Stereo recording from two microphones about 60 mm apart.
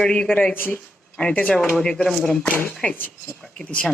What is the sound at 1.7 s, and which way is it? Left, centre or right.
Speech, centre.